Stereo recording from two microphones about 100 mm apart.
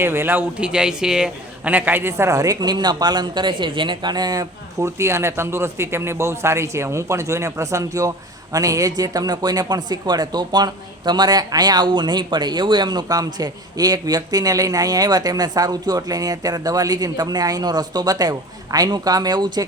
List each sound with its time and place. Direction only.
0.0 s a man's voice: 25° right (ahead or behind); by 19.6 s 45° right (ahead or behind)